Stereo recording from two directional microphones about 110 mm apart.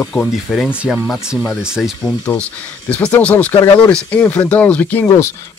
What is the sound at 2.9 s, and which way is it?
Speech, 10° left (ahead or behind).